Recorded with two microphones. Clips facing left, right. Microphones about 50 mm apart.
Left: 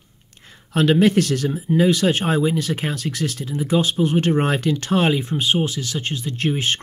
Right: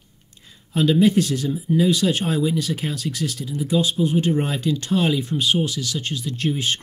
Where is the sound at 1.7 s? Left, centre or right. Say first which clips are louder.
Left 2 dB; left.